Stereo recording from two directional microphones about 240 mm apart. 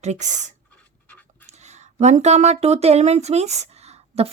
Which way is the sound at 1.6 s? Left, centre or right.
Right.